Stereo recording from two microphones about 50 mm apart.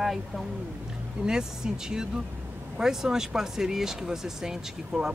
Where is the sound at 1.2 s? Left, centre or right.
Centre.